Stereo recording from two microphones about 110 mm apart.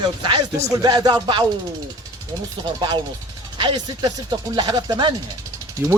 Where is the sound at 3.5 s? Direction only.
45° right (ahead or behind).